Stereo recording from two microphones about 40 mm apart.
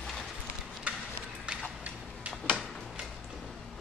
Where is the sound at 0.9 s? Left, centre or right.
Right.